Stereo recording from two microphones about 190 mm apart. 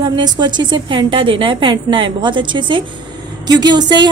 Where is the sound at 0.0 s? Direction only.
25° right (ahead or behind).